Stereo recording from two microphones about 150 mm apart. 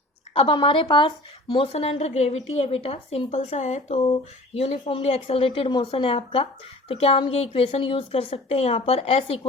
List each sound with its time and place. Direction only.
0.3 s speech: 35° left (ahead or behind)